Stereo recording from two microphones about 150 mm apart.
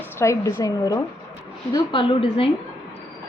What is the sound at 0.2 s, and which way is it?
Speech, 20° left (ahead or behind).